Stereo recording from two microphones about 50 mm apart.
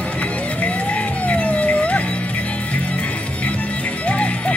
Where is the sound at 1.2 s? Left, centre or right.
Left.